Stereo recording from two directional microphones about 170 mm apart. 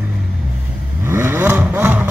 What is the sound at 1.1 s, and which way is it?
Vehicle, 15° right (ahead or behind).